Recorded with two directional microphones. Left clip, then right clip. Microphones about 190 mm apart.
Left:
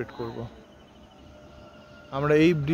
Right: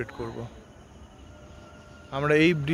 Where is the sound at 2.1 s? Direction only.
Centre (ahead or behind).